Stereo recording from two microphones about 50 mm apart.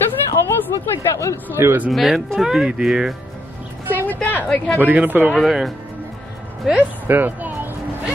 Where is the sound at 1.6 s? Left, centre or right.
Right.